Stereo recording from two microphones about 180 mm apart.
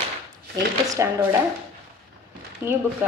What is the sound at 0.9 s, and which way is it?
Speech, 15° right (ahead or behind).